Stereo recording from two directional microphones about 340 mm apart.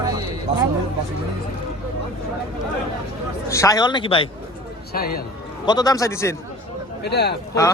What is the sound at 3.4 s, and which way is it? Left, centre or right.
Speech, centre.